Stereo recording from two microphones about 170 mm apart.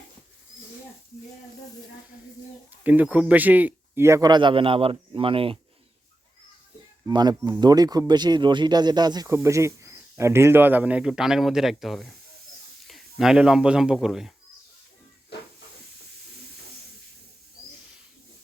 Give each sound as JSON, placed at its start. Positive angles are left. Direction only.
{"t": 2.8, "sound": "speech", "side_deg": -10}
{"t": 7.1, "sound": "speech", "side_deg": -25}